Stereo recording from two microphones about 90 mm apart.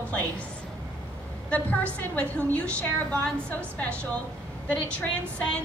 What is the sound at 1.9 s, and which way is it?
A woman's voice, 15° left (ahead or behind).